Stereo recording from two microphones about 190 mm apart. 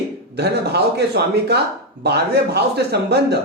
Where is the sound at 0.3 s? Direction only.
60° right (ahead or behind).